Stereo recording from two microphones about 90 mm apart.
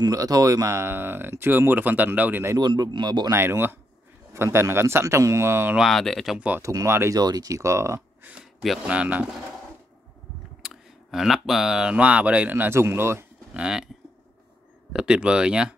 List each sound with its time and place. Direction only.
0.0 s speech: 40° right (ahead or behind); by 2.4 s 20° right (ahead or behind)
2.6 s speech: 50° right (ahead or behind)
3.3 s speech: 25° right (ahead or behind)
5.8 s speech: 5° left (ahead or behind)
6.3 s speech: 15° right (ahead or behind)
6.6 s speech: 35° right (ahead or behind)
7.2 s speech: 45° right (ahead or behind)
8.8 s speech: 15° right (ahead or behind)
10.6 s speech: 5° right (ahead or behind); by 13.2 s 30° right (ahead or behind)
13.5 s speech: 10° right (ahead or behind)
14.9 s speech: 10° right (ahead or behind)